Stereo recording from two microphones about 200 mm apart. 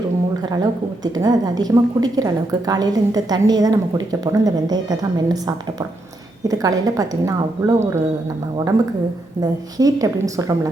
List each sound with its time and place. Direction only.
0.5 s a woman's voice: 20° right (ahead or behind)
9.4 s a woman's voice: 20° right (ahead or behind)